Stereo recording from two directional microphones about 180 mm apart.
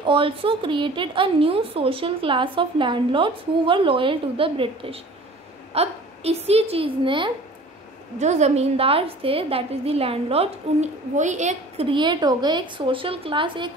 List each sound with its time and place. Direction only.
0.0 s a woman's voice: 30° right (ahead or behind)
8.2 s a woman's voice: 40° right (ahead or behind)